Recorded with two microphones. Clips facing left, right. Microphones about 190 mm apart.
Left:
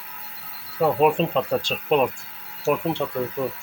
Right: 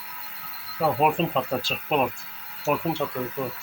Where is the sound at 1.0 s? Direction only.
Centre (ahead or behind).